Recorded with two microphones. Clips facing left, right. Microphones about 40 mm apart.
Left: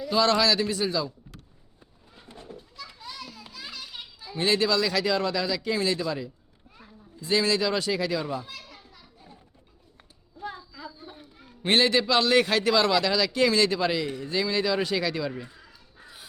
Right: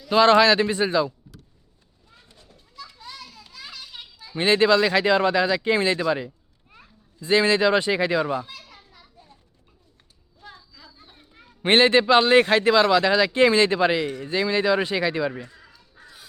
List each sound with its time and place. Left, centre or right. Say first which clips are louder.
0.1 s speech: right 7 dB; right
2.1 s goat: left 7 dB; left
3.0 s children playing: left 1 dB; centre
4.4 s speech: right 6 dB; right
8.4 s children playing: even; centre
10.4 s a sound: left 8 dB; centre
11.0 s children playing: left 7 dB; centre
11.6 s speech: right 5 dB; right
15.4 s crow: right 2 dB; centre